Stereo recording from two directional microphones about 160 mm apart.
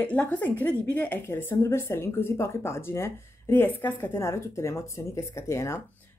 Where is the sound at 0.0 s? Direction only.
10° left (ahead or behind).